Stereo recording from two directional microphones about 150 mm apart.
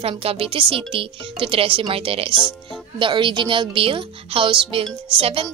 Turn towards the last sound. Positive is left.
turn(degrees=-40)  # may be behind; listen again after turning